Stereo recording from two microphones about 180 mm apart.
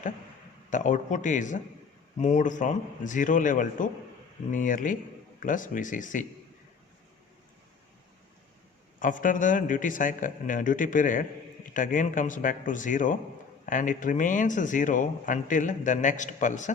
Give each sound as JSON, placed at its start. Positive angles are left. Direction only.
{"t": 0.7, "sound": "speech", "side_deg": 45}
{"t": 9.0, "sound": "speech", "side_deg": 45}